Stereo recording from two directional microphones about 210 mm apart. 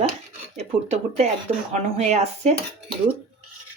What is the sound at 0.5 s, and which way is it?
Speech, 30° right (ahead or behind).